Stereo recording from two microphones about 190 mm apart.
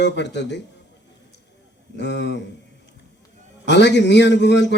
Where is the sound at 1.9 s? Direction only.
65° left (ahead or behind).